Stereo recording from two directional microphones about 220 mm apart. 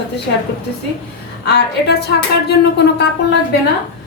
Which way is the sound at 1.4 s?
50° left (ahead or behind).